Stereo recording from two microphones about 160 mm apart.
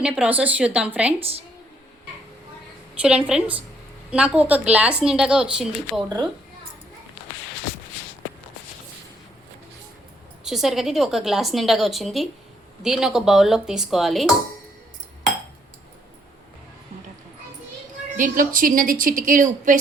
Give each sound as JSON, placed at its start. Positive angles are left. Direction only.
{"t": 0.0, "sound": "speech", "side_deg": -5}
{"t": 2.9, "sound": "a woman's voice", "side_deg": -5}
{"t": 10.4, "sound": "a woman's voice", "side_deg": 0}
{"t": 18.2, "sound": "a woman's voice", "side_deg": -60}